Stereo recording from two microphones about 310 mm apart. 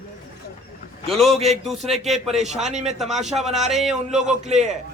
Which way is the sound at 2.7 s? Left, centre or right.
Right.